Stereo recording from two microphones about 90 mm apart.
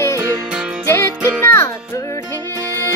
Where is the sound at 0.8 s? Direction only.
30° left (ahead or behind).